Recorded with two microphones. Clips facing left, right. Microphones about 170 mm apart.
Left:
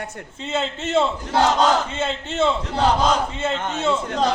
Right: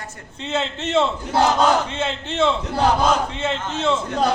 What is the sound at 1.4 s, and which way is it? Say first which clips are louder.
Speech: right 1 dB; 10° right (ahead or behind).